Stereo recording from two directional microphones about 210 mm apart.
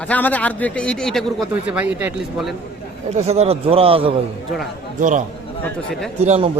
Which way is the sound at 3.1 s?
30° right (ahead or behind).